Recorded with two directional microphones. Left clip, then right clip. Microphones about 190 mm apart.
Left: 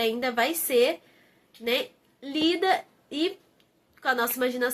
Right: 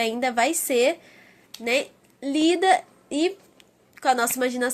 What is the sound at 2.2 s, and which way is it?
A woman's voice, 45° right (ahead or behind).